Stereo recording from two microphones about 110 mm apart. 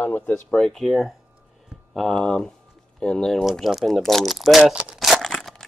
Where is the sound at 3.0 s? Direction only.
5° left (ahead or behind).